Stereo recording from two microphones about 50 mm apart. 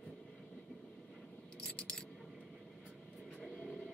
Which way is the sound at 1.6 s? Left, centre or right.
Centre.